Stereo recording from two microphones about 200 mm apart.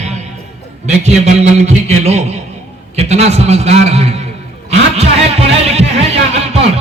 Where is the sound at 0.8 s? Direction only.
35° right (ahead or behind).